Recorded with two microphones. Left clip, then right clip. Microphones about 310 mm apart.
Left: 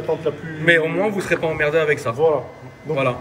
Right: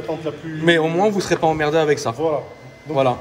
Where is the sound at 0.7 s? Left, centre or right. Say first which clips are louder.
Even; centre.